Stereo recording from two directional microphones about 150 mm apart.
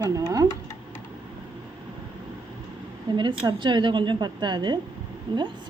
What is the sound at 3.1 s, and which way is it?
A woman's voice, 30° right (ahead or behind).